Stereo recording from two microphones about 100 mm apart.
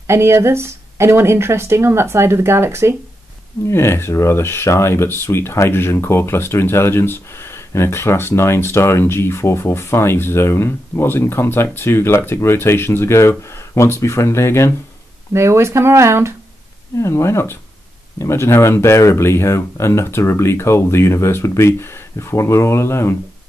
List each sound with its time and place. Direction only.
0.0 s speech: 25° right (ahead or behind)
3.6 s speech: 25° left (ahead or behind)
15.3 s speech: 25° right (ahead or behind)
17.0 s speech: 30° left (ahead or behind)